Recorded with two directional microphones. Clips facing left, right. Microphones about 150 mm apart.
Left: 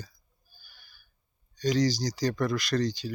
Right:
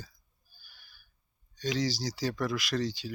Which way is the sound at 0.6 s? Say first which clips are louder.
Left 1 dB; 5° right (ahead or behind).